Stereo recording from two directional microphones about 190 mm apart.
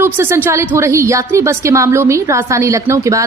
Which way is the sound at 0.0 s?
10° right (ahead or behind).